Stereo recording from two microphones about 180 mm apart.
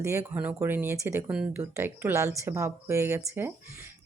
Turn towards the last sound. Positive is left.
turn(degrees=-10)  # may be behind; listen again after turning